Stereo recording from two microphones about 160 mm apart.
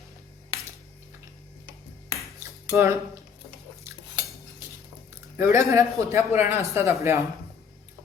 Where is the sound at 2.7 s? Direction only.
20° right (ahead or behind).